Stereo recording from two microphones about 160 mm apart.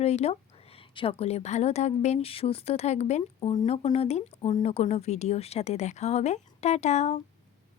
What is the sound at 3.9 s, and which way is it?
Speech, 40° left (ahead or behind).